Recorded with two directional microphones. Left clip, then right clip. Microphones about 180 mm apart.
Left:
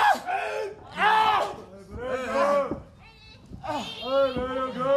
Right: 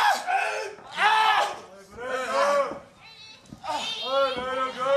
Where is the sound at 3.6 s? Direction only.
10° right (ahead or behind).